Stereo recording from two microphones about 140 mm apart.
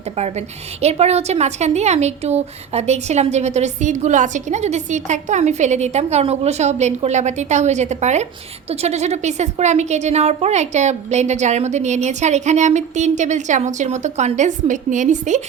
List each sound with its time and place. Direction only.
0.2 s a woman's voice: 50° right (ahead or behind)